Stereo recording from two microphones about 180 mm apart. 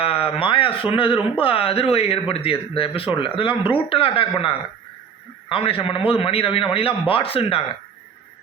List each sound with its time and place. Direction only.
0.0 s speech: 30° left (ahead or behind)